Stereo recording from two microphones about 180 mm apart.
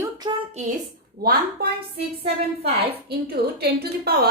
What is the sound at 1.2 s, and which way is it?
Speech, 60° right (ahead or behind).